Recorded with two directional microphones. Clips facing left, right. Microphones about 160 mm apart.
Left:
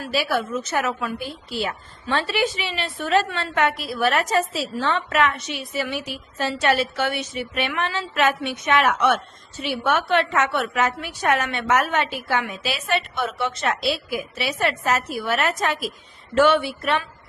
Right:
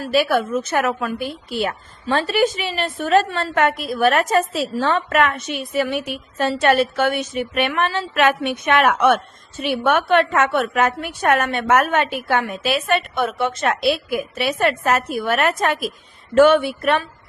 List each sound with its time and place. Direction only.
0.1 s a woman's voice: 55° right (ahead or behind)
2.0 s a woman's voice: 40° right (ahead or behind)